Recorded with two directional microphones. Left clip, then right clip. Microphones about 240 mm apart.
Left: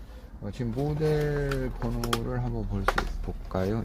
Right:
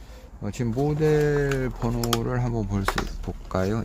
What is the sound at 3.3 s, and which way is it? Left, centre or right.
Speech, right.